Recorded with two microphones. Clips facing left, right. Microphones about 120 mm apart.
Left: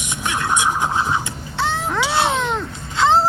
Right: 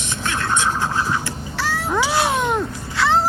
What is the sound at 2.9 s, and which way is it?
Vehicle, 25° left (ahead or behind).